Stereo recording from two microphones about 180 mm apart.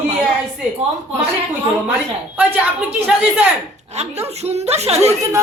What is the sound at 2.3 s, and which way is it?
A man's voice, 10° right (ahead or behind).